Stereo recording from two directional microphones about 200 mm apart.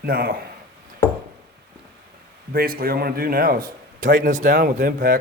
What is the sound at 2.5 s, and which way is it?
A man's voice, 45° right (ahead or behind).